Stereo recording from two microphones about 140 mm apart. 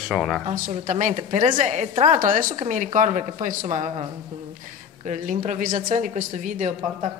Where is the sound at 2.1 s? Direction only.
75° right (ahead or behind).